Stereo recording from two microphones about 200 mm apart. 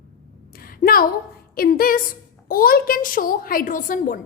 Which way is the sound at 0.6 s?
45° left (ahead or behind).